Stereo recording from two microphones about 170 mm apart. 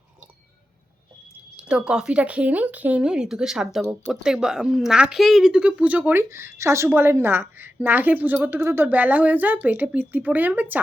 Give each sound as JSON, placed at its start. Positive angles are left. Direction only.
{"t": 1.5, "sound": "speech", "side_deg": -5}